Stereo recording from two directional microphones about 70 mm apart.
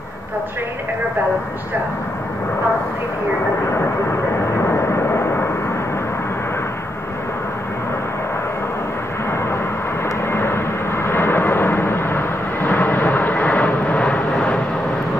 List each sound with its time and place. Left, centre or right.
4.6 s vehicle: left
10.3 s vehicle: left